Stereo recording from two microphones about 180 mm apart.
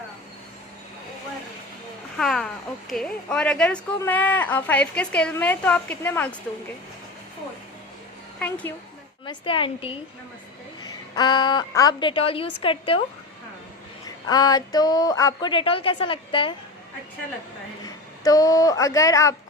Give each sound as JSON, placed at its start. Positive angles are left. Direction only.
{"t": 2.1, "sound": "a sound", "side_deg": 0}
{"t": 2.9, "sound": "a woman's voice", "side_deg": 5}
{"t": 8.4, "sound": "a woman's voice", "side_deg": 10}
{"t": 9.2, "sound": "a woman's voice", "side_deg": 25}
{"t": 11.1, "sound": "a woman's voice", "side_deg": 25}
{"t": 14.3, "sound": "a woman's voice", "side_deg": 20}
{"t": 17.8, "sound": "speech", "side_deg": 20}